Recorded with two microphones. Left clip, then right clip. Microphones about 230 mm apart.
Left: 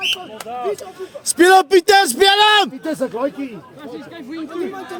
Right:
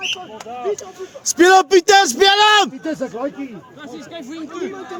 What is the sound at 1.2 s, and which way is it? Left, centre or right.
A man's voice, centre.